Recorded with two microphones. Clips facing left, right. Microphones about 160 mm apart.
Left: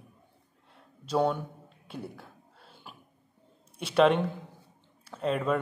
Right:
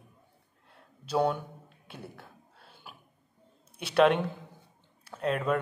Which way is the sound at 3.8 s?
5° right (ahead or behind).